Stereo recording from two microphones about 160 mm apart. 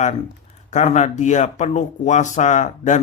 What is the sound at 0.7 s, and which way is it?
Speech, 45° left (ahead or behind).